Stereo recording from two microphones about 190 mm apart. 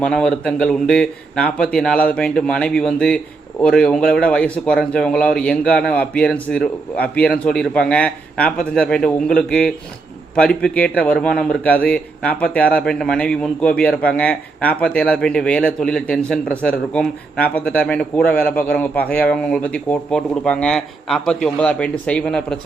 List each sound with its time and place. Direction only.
0.0 s a man's voice: 5° left (ahead or behind)